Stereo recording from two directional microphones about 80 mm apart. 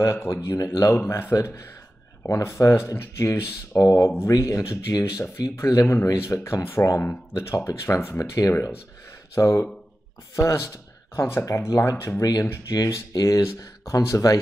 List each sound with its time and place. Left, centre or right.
0.0 s speech: left
2.2 s speech: left
7.5 s speech: left
12.2 s speech: left